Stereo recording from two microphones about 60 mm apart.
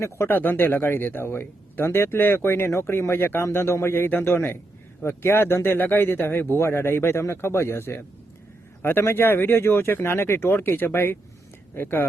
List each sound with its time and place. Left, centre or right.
0.3 s speech: left